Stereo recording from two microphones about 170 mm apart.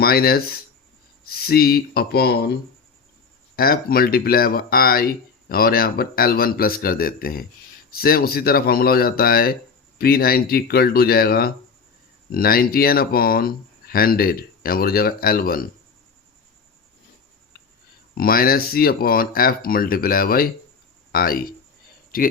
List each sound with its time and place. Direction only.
0.0 s speech: 65° left (ahead or behind)
3.5 s speech: 60° left (ahead or behind)
18.1 s speech: 60° left (ahead or behind)